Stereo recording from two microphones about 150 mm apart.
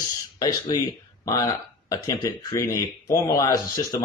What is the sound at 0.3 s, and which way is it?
Speech, 30° left (ahead or behind).